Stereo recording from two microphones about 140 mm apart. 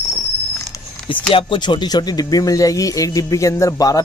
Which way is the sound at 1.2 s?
40° left (ahead or behind).